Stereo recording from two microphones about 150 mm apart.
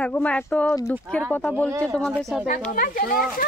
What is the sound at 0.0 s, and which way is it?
Speech, 10° left (ahead or behind).